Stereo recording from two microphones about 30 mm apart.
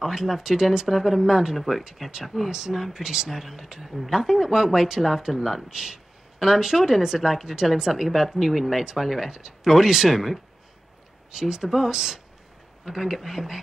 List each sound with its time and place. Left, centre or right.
0.1 s speech: centre
1.6 s speech: centre
3.0 s speech: centre
5.7 s speech: right
11.3 s speech: centre